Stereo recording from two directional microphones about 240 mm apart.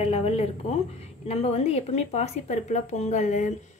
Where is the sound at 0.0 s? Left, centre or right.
Left.